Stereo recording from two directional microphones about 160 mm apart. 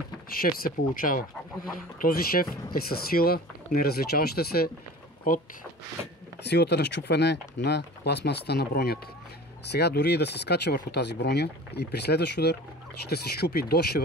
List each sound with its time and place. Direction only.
0.3 s speech: 65° left (ahead or behind)
5.3 s speech: 60° left (ahead or behind)
6.4 s speech: 90° left
9.7 s speech: 90° left